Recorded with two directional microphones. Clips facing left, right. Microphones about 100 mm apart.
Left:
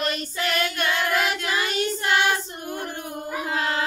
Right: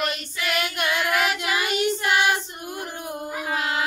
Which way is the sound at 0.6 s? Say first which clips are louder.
Even; 15° right (ahead or behind).